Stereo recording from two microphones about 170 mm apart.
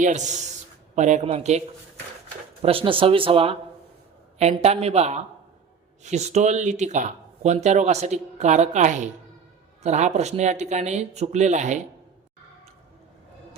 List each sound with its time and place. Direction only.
0.0 s speech: 45° right (ahead or behind)